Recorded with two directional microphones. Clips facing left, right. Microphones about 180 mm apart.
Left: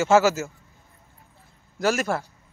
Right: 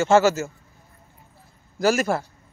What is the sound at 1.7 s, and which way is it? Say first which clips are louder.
Speech: right 3 dB; centre (ahead or behind).